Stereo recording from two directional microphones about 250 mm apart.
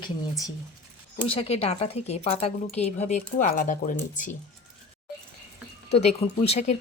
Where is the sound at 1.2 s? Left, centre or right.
Left.